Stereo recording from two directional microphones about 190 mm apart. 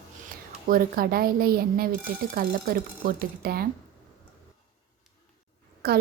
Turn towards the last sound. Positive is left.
turn(degrees=-55)  # may be behind; listen again after turning